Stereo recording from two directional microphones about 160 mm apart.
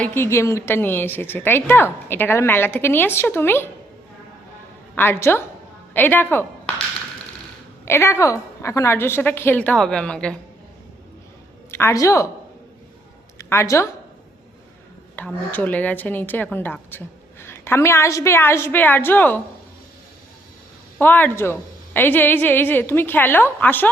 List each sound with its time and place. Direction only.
0.0 s a woman's voice: 15° left (ahead or behind)
4.9 s a woman's voice: 15° left (ahead or behind)
7.9 s a woman's voice: 15° left (ahead or behind)
11.7 s a woman's voice: 15° left (ahead or behind)
13.4 s speech: 15° left (ahead or behind)
15.1 s a woman's voice: 10° left (ahead or behind)
21.0 s a woman's voice: 10° left (ahead or behind)